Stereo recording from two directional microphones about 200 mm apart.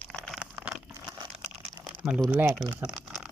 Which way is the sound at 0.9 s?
15° right (ahead or behind).